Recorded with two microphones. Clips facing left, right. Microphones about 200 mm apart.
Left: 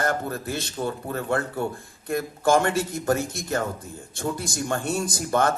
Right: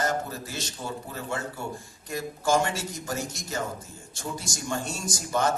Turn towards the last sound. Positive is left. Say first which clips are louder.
# left 3 dB
turn(degrees=60)  # may be behind; listen again after turning